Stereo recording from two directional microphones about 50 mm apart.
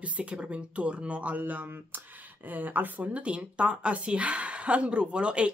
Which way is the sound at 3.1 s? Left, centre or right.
Right.